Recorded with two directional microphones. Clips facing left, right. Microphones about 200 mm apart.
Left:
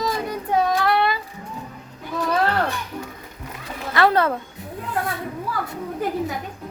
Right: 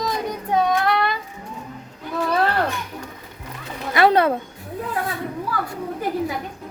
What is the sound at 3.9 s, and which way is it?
Speech, 15° right (ahead or behind).